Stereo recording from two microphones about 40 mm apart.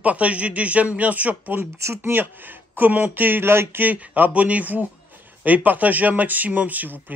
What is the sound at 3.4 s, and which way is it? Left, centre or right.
Speech, right.